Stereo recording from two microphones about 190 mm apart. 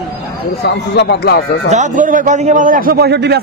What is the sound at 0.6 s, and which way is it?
Speech, 60° left (ahead or behind).